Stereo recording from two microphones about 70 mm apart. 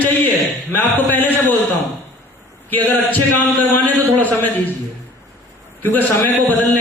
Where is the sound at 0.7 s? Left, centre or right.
Left.